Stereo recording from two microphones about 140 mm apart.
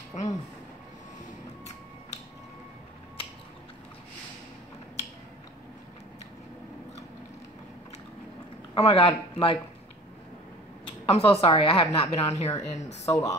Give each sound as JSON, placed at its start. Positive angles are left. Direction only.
{"t": 0.1, "sound": "a sound", "side_deg": 55}
{"t": 8.7, "sound": "speech", "side_deg": 45}
{"t": 10.9, "sound": "a woman's voice", "side_deg": 45}
{"t": 12.7, "sound": "speech", "side_deg": 25}